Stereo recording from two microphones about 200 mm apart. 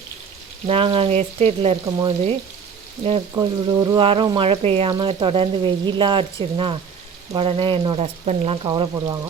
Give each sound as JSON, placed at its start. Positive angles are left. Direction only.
{"t": 0.7, "sound": "speech", "side_deg": -25}